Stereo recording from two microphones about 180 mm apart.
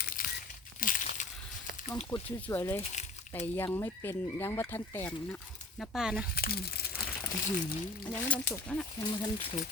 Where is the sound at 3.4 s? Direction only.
15° left (ahead or behind); by 6.2 s 5° right (ahead or behind).